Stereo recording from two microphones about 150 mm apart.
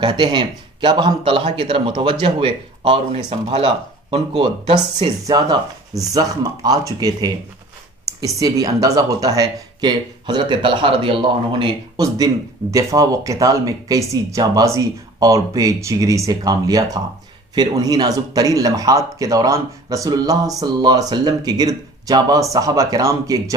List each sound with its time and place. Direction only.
0.0 s speech: 30° right (ahead or behind)
5.2 s speech: 25° right (ahead or behind)